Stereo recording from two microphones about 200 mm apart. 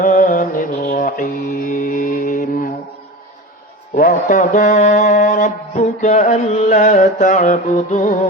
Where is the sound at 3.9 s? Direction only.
45° left (ahead or behind).